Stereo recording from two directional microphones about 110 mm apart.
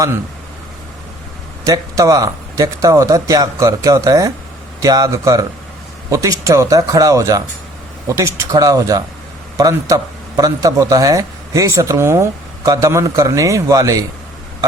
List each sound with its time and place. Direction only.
1.6 s speech: 30° right (ahead or behind)